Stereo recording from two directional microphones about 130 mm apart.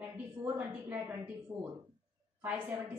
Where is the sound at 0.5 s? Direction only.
10° right (ahead or behind).